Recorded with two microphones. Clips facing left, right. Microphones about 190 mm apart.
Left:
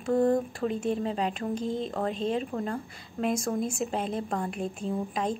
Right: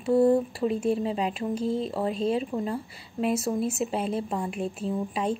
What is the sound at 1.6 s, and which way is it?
Speech, 35° right (ahead or behind).